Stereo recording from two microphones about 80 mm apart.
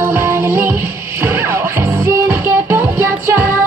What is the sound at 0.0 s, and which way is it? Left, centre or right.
Music, right.